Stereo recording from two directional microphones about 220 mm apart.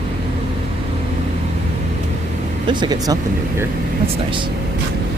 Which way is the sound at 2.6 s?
20° right (ahead or behind).